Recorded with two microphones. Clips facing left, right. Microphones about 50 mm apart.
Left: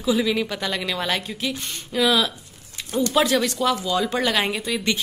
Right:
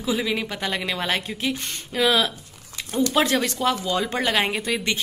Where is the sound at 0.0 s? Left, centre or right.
Right.